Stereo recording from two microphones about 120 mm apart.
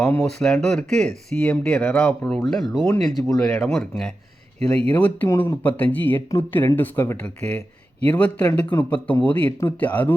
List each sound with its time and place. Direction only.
0.1 s speech: 10° left (ahead or behind)
2.0 s speech: 5° left (ahead or behind)
4.9 s speech: 15° left (ahead or behind)